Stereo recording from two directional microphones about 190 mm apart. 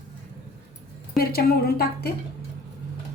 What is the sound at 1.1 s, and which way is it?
Speech, 55° left (ahead or behind).